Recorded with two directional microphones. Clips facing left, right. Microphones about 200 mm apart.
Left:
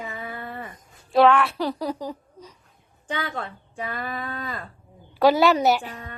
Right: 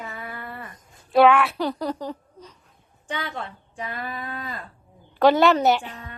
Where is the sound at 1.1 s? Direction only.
5° right (ahead or behind).